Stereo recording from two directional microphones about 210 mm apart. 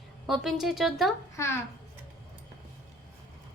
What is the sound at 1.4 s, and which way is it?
Speech, 15° left (ahead or behind).